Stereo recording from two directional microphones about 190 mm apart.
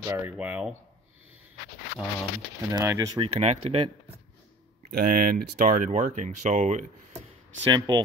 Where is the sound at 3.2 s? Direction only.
35° right (ahead or behind).